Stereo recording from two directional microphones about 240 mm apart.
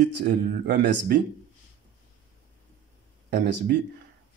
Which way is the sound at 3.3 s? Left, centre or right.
Right.